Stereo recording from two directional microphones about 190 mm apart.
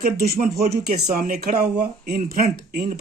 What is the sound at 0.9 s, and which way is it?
Speech, 50° right (ahead or behind).